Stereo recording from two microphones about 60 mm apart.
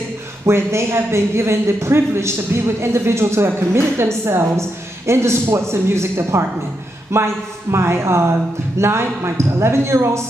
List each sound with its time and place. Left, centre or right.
0.5 s a man's voice: right